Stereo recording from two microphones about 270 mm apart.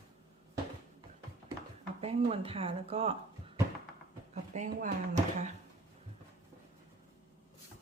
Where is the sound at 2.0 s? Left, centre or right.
Right.